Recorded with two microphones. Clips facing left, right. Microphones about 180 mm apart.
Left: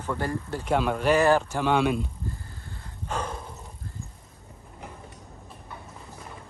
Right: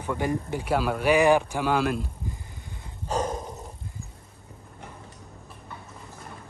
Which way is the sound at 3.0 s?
40° right (ahead or behind).